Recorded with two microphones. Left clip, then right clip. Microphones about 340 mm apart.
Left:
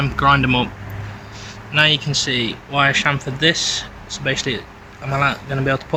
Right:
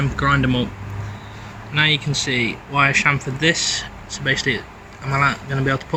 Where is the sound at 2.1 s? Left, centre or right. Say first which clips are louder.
Left 1 dB; centre.